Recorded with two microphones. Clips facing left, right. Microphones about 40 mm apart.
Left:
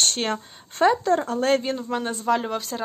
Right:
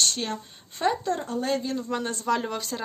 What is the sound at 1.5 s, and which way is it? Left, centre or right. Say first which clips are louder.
Speech: left 6 dB; left.